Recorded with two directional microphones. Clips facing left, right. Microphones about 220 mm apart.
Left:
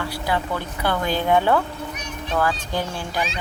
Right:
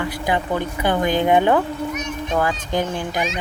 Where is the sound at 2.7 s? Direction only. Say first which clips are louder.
Right 4 dB; 20° right (ahead or behind).